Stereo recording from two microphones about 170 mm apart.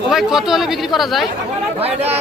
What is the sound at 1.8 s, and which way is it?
Speech, 40° right (ahead or behind).